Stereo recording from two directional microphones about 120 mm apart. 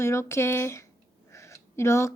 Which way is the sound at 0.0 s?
20° left (ahead or behind).